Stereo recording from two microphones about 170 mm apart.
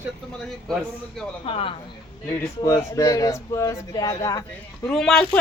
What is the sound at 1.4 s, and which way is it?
Speech, 35° left (ahead or behind).